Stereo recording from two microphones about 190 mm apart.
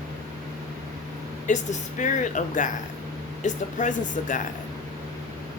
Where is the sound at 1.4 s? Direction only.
40° left (ahead or behind).